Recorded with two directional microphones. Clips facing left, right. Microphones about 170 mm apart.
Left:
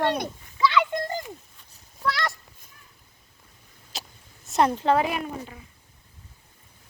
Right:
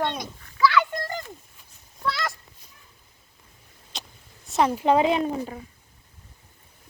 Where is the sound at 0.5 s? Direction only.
20° left (ahead or behind).